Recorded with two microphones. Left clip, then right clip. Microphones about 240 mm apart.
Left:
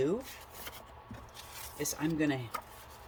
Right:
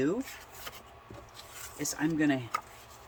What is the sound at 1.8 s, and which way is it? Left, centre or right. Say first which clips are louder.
Speech: right 3 dB; centre.